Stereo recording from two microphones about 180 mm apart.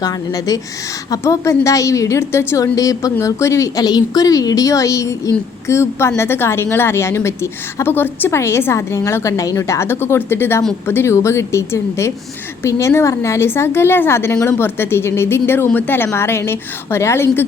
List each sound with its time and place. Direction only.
0.0 s a woman's voice: 20° left (ahead or behind)